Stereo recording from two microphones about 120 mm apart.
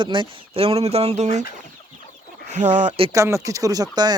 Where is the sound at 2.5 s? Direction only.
80° right.